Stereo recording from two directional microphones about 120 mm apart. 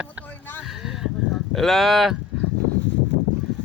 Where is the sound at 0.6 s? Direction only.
Centre (ahead or behind).